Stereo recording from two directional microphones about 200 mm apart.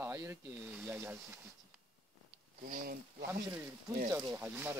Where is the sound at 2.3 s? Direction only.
45° right (ahead or behind).